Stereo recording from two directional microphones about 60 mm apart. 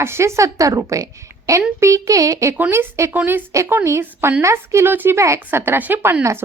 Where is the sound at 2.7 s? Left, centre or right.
Right.